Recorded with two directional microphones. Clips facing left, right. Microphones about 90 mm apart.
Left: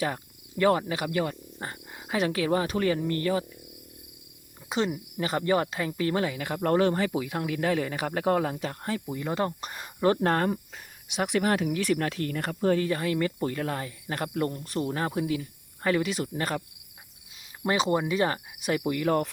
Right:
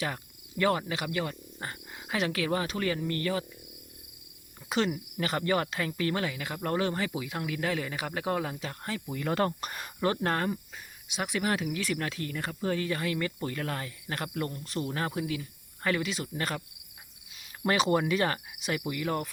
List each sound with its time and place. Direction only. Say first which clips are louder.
0.0 s cricket: left 4 dB; 30° left (ahead or behind)
1.5 s speech: left 2 dB; 25° left (ahead or behind)
4.7 s insect: left 1 dB; 25° left (ahead or behind)
6.0 s speech: left 4 dB; 25° left (ahead or behind)
9.0 s speech: right 2 dB; 15° left (ahead or behind)
10.1 s speech: left 5 dB; 35° left (ahead or behind)
12.6 s speech: left 6 dB; 35° left (ahead or behind)
17.6 s insect: left 1 dB; 25° left (ahead or behind)
18.7 s speech: left 6 dB; 35° left (ahead or behind)